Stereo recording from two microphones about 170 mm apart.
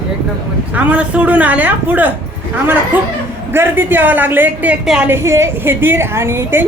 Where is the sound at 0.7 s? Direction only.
10° right (ahead or behind).